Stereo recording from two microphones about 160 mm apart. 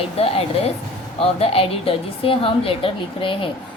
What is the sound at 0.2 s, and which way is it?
A woman's voice, 40° left (ahead or behind).